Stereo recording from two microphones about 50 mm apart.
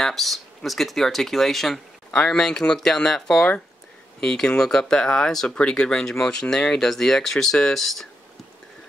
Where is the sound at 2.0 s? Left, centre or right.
Centre.